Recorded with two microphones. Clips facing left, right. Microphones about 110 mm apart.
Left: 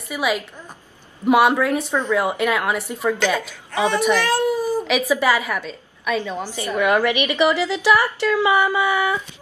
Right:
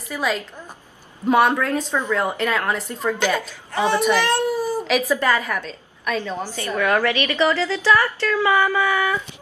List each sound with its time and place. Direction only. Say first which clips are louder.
0.1 s a woman's voice: left 1 dB; 10° left (ahead or behind)
4.0 s a child's voice: even; centre (ahead or behind)
4.5 s cat: left 2 dB; 45° right (ahead or behind)
4.8 s a woman's voice: even; 5° left (ahead or behind)